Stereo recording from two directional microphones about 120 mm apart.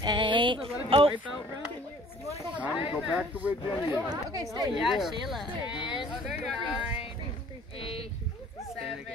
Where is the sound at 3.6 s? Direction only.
40° left (ahead or behind).